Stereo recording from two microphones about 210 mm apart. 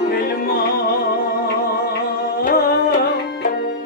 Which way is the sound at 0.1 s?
45° left (ahead or behind).